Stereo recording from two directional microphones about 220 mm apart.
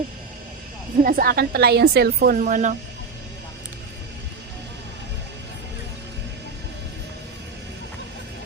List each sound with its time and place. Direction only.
1.0 s a woman's voice: 45° right (ahead or behind)